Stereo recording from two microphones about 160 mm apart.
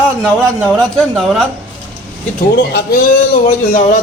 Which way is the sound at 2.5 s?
80° left.